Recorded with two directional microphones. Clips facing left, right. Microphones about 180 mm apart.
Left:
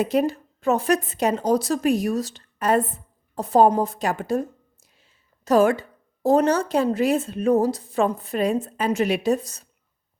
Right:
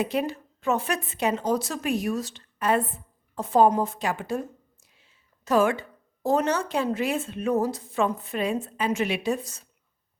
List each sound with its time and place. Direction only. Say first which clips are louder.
0.0 s a woman's voice: left 5 dB; 40° left (ahead or behind)